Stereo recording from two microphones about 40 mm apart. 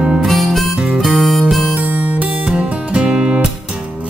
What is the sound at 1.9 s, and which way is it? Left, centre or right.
Music, right.